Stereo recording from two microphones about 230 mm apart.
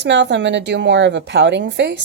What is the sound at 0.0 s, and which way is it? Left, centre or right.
A woman's voice, right.